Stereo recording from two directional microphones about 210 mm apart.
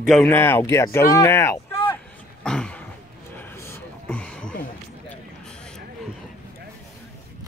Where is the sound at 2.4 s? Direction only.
5° left (ahead or behind).